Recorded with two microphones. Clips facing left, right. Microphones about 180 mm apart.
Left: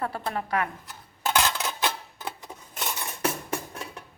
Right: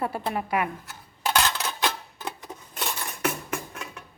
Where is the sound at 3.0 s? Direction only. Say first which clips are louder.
Left 1 dB; 30° left (ahead or behind).